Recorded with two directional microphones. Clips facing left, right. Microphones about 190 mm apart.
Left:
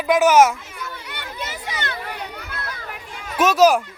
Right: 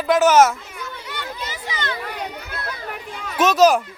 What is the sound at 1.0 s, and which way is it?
Chatter, 60° left (ahead or behind).